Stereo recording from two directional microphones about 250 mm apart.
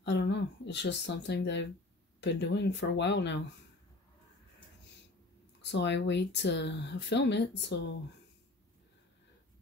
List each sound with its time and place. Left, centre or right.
0.0 s speech: left
5.6 s speech: left